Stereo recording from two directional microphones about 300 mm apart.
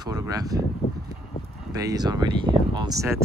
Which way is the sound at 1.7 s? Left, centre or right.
Centre.